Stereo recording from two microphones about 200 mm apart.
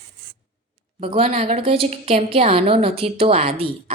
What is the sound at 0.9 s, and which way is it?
A woman's voice, 25° right (ahead or behind).